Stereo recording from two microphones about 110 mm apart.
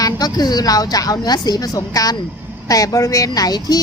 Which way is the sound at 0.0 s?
35° left (ahead or behind).